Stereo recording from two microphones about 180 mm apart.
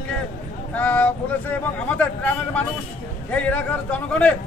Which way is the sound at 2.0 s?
10° left (ahead or behind).